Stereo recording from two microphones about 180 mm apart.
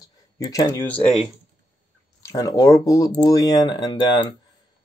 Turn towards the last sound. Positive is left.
turn(degrees=25)  # may be behind; listen again after turning